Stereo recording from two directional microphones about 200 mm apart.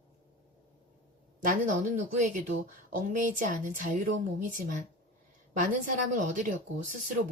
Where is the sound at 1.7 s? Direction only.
40° right (ahead or behind).